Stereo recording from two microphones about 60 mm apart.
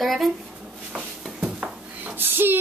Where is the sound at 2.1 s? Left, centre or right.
Right.